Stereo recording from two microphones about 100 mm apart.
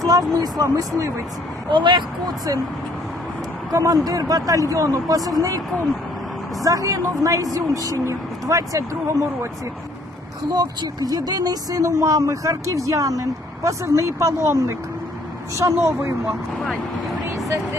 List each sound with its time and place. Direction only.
0.0 s a sound: 40° right (ahead or behind)
0.3 s speech: 40° right (ahead or behind)
1.7 s speech: 55° right (ahead or behind)
3.7 s speech: 35° right (ahead or behind)
10.5 s speech: 40° right (ahead or behind)
15.8 s speech: 25° right (ahead or behind)